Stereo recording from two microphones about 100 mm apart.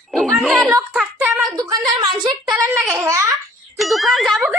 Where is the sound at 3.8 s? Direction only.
Centre (ahead or behind).